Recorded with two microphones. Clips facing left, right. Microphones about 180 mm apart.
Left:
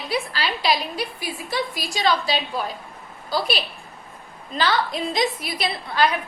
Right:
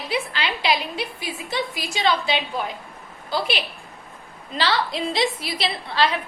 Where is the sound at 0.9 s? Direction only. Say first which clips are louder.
Left 1 dB; 20° right (ahead or behind).